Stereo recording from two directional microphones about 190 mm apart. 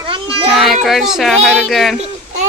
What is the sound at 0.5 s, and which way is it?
Speech, centre (ahead or behind).